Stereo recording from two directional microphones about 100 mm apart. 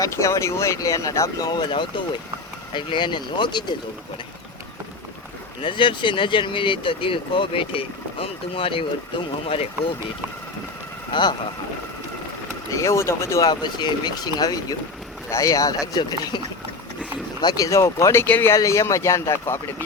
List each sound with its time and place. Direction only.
0.0 s speech: 30° left (ahead or behind); by 3.8 s 50° left (ahead or behind)
5.6 s speech: 55° left (ahead or behind)
11.1 s speech: 50° left (ahead or behind)
12.8 s speech: 30° left (ahead or behind)
13.4 s speech: 45° left (ahead or behind)
17.4 s speech: 40° left (ahead or behind)